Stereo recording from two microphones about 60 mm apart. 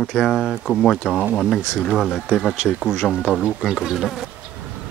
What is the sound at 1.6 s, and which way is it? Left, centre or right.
Speech, centre.